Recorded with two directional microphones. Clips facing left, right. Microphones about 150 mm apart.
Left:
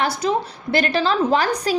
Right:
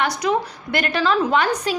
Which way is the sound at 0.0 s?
30° left (ahead or behind).